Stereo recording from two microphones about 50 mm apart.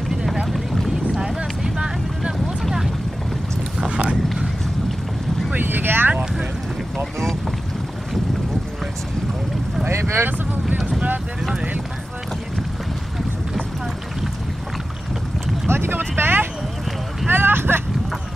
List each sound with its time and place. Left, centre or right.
0.1 s vehicle: centre
0.8 s boat: centre
3.9 s a sound: right
5.5 s vehicle: right
9.8 s boat: right
15.7 s boat: right
17.3 s vehicle: right